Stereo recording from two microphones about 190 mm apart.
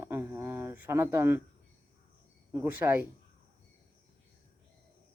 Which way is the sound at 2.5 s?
10° right (ahead or behind).